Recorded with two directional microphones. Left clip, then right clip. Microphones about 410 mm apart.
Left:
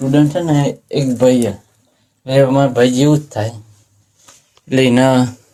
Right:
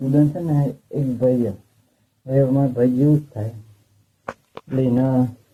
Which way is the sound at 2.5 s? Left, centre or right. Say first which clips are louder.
Left 7 dB; left.